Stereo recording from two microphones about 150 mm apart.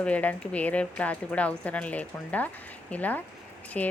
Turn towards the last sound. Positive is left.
turn(degrees=10)  # may be behind; listen again after turning